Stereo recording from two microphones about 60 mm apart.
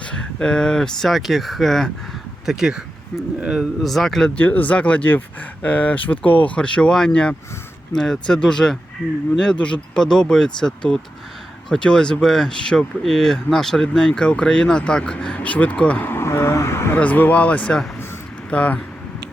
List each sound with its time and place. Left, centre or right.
0.0 s speech: centre
2.5 s a man's voice: centre
3.8 s speech: centre
4.4 s speech: left
16.0 s speech: left
17.0 s speech: left